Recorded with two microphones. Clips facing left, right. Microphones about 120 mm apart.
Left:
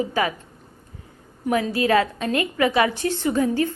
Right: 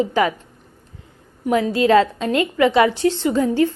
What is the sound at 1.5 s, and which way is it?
A woman's voice, 25° right (ahead or behind).